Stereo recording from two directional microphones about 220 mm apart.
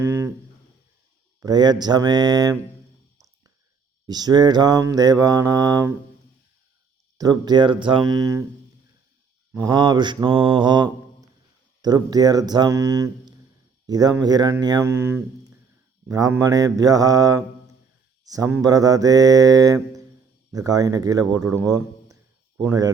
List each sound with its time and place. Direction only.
0.0 s a sound: 10° right (ahead or behind)
1.4 s mantra: 20° right (ahead or behind)
4.0 s mantra: 20° right (ahead or behind)
7.2 s mantra: 15° right (ahead or behind)
9.5 s mantra: 15° right (ahead or behind)
21.5 s speech: 15° right (ahead or behind)
22.5 s mantra: 10° right (ahead or behind)